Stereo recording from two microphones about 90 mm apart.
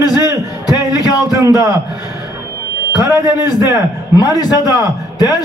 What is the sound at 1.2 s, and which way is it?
Speech, 40° right (ahead or behind).